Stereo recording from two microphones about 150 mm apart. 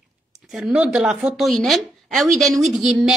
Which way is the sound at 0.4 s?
5° right (ahead or behind).